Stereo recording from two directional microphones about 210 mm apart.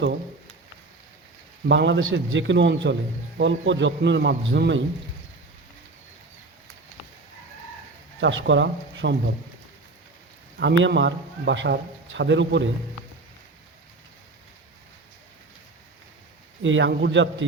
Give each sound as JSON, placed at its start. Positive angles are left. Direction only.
{"t": 1.6, "sound": "speech", "side_deg": -55}
{"t": 8.2, "sound": "speech", "side_deg": -65}
{"t": 10.6, "sound": "speech", "side_deg": -55}
{"t": 16.6, "sound": "speech", "side_deg": -60}